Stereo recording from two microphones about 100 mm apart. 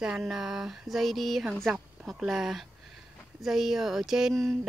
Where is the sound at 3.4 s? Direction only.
5° right (ahead or behind).